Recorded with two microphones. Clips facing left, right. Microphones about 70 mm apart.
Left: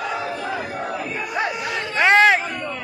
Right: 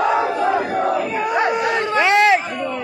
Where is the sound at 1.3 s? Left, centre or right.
Right.